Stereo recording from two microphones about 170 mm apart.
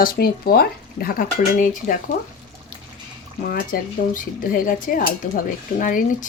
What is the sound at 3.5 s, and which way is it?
Speech, 55° left (ahead or behind).